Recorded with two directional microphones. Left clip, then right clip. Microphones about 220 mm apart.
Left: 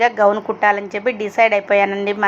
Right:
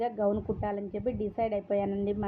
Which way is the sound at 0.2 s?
30° left (ahead or behind).